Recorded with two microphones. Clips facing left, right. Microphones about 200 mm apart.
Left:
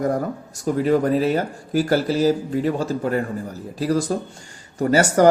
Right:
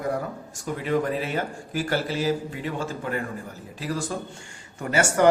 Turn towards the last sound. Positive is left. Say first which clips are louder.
# left 5 dB
turn(degrees=40)  # may be behind; listen again after turning